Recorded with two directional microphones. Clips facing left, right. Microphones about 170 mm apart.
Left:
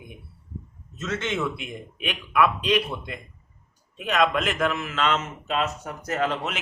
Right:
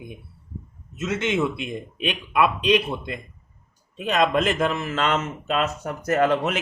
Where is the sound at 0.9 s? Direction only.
10° right (ahead or behind); by 5.1 s 40° right (ahead or behind).